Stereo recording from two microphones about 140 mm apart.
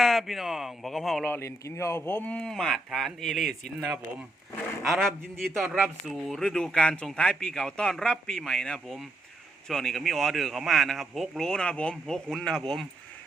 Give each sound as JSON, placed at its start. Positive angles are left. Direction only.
{"t": 0.0, "sound": "speech", "side_deg": 0}
{"t": 1.3, "sound": "speech", "side_deg": 20}
{"t": 3.8, "sound": "speech", "side_deg": -10}
{"t": 5.6, "sound": "speech", "side_deg": -10}